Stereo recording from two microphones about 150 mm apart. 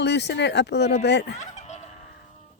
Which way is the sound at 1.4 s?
50° left (ahead or behind).